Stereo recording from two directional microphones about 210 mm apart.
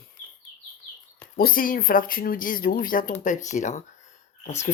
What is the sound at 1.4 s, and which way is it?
Speech, 45° left (ahead or behind).